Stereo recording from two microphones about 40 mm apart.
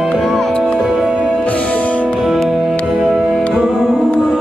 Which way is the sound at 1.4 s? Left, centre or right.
Left.